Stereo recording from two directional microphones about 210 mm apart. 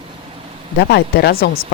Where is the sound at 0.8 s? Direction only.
50° left (ahead or behind).